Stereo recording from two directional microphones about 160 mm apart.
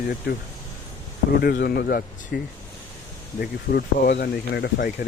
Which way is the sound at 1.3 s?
70° left (ahead or behind).